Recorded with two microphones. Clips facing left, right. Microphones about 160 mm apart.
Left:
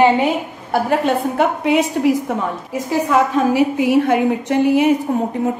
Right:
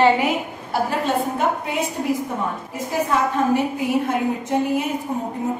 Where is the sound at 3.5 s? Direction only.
80° left.